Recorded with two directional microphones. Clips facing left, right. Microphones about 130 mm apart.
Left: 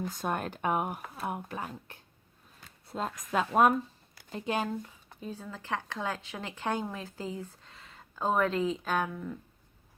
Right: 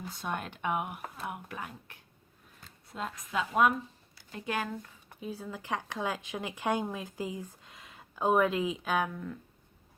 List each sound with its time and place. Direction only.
0.2 s speech: 40° left (ahead or behind)
4.3 s speech: 25° left (ahead or behind)
5.2 s speech: 10° right (ahead or behind); by 9.4 s 5° left (ahead or behind)